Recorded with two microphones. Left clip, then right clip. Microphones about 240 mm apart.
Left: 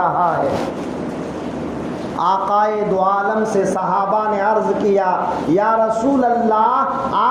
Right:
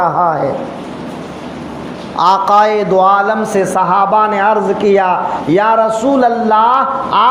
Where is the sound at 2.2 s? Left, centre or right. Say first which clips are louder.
Right 7 dB; right.